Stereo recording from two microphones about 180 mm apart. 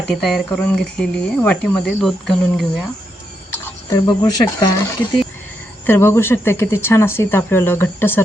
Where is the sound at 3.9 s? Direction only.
20° left (ahead or behind).